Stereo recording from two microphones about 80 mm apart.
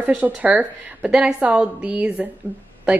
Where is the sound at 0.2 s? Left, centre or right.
Centre.